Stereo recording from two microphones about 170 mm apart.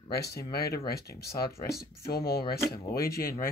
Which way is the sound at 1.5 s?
15° left (ahead or behind).